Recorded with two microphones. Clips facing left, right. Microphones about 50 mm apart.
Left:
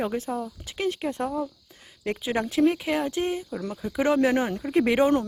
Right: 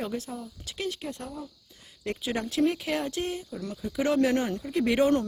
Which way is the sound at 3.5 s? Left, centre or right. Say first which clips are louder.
Left 3 dB; left.